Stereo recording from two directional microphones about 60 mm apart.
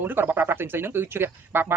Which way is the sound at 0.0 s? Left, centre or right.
Right.